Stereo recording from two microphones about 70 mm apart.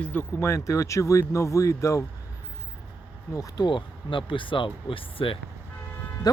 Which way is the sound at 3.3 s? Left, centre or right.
Left.